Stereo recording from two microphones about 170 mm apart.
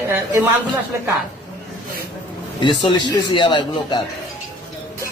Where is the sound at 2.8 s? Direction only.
25° left (ahead or behind).